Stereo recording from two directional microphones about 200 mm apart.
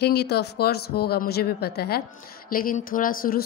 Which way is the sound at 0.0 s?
55° left (ahead or behind).